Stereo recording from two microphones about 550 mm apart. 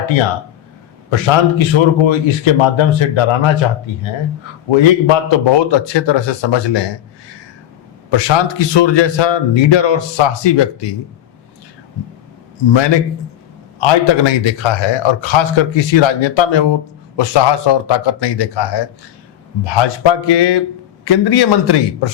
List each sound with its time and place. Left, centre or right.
1.1 s a man's voice: left
8.1 s a man's voice: left
12.7 s a man's voice: left